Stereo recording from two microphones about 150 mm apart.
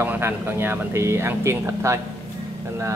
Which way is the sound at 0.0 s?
15° right (ahead or behind).